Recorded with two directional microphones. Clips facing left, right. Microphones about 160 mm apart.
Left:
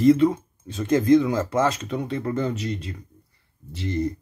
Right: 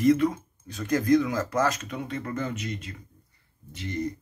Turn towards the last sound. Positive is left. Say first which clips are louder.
# left 5 dB
turn(degrees=30)  # may be behind; listen again after turning